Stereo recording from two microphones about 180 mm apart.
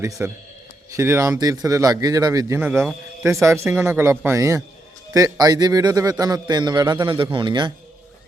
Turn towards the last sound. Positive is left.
turn(degrees=-25)  # may be behind; listen again after turning